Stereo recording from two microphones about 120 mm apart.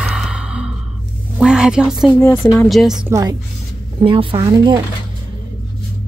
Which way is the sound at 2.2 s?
20° left (ahead or behind).